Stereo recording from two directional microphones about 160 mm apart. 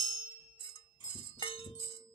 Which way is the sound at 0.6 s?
30° left (ahead or behind).